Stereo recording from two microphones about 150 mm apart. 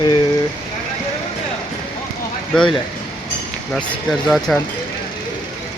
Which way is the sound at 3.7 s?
Centre (ahead or behind).